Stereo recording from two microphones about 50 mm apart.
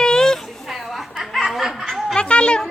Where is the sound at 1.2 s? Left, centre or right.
Centre.